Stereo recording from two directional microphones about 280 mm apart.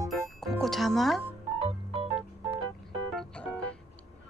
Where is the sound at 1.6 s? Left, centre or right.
Centre.